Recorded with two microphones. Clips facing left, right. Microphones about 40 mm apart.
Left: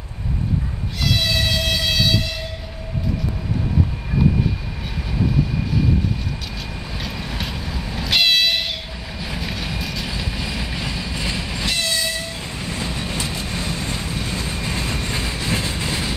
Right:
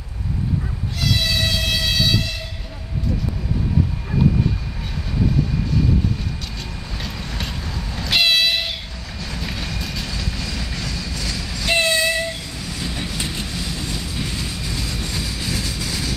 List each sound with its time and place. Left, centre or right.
1.0 s vehicle: centre
5.7 s vehicle: centre
6.9 s train: centre
9.2 s vehicle: centre
10.0 s train: centre
11.7 s train: right
12.5 s train: left